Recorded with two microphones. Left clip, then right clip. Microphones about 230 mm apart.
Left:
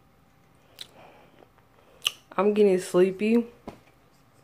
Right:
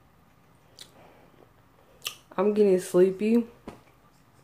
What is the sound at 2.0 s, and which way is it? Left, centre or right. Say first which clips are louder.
Speech: left 2 dB; centre.